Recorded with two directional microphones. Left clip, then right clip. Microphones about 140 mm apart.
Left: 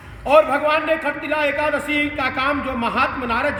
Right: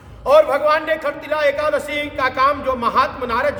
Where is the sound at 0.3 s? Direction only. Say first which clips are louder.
Right 2 dB; 25° right (ahead or behind).